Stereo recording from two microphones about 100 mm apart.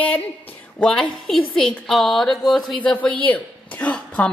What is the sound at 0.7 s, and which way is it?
A woman's voice, 10° left (ahead or behind).